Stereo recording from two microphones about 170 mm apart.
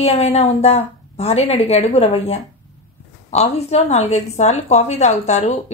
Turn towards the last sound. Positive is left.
turn(degrees=40)  # may be behind; listen again after turning